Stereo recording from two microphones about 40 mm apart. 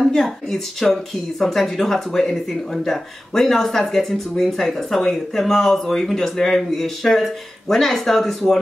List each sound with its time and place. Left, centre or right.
0.1 s speech: centre